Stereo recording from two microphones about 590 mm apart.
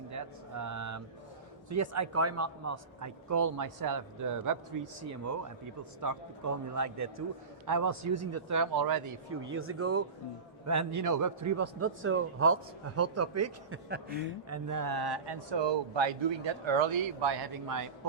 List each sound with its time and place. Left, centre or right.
0.1 s a sound: right
1.7 s speech: right
9.5 s speech: right
14.7 s speech: right